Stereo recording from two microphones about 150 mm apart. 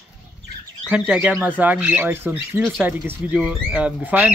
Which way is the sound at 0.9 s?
5° right (ahead or behind).